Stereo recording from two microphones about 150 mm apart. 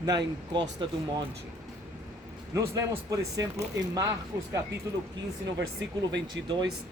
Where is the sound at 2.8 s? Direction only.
20° right (ahead or behind).